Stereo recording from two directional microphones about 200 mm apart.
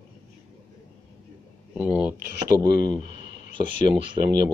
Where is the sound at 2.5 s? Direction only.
20° right (ahead or behind).